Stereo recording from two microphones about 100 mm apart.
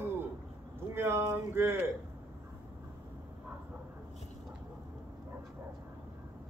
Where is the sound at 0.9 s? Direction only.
25° right (ahead or behind).